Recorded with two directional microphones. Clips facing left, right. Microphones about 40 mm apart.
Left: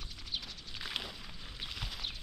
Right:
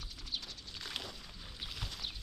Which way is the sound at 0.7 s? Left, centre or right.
Centre.